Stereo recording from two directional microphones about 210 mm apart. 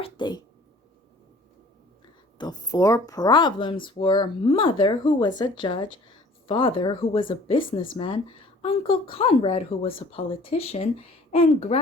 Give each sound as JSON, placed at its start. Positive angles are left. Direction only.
{"t": 0.0, "sound": "speech", "side_deg": 20}
{"t": 2.4, "sound": "speech", "side_deg": 20}